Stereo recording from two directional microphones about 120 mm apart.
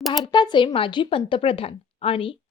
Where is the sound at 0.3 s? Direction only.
40° left (ahead or behind).